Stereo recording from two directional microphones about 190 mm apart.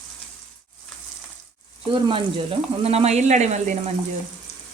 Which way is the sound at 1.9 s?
25° right (ahead or behind).